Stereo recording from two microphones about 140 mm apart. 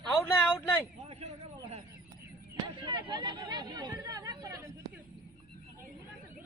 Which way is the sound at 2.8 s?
35° right (ahead or behind).